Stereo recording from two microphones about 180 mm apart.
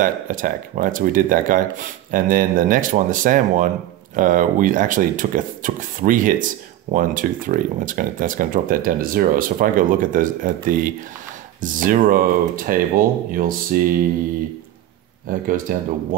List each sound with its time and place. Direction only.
0.0 s speech: 50° right (ahead or behind)
15.2 s speech: 50° right (ahead or behind)